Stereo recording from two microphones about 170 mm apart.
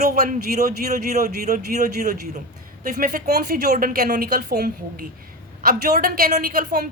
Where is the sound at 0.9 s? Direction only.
50° right (ahead or behind).